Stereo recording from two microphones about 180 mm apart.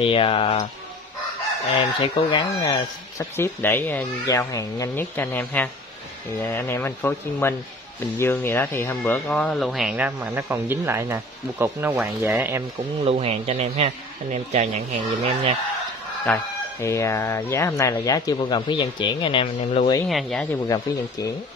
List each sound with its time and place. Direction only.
0.0 s speech: 30° left (ahead or behind)
1.8 s speech: 25° left (ahead or behind); by 12.6 s 10° right (ahead or behind)
13.0 s speech: 35° right (ahead or behind)
15.0 s speech: 30° right (ahead or behind)
16.3 s speech: 5° left (ahead or behind)
16.8 s speech: 15° left (ahead or behind); by 19.9 s 35° left (ahead or behind)
20.1 s speech: centre (ahead or behind)
20.6 s speech: 20° left (ahead or behind)